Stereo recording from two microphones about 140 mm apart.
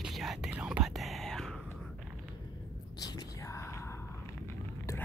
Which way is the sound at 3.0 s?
30° left (ahead or behind).